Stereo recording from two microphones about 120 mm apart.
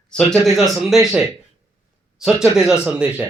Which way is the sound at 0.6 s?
20° right (ahead or behind).